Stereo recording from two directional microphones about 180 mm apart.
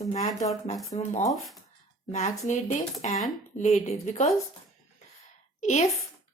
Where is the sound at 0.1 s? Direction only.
35° left (ahead or behind).